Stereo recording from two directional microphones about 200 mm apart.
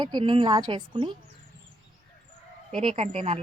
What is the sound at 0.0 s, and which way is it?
Speech, 20° right (ahead or behind).